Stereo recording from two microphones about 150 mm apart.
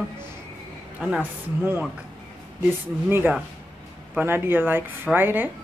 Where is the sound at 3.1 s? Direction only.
15° right (ahead or behind).